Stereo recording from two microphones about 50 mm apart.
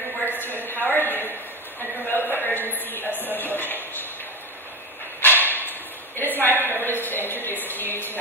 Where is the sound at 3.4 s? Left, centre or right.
Left.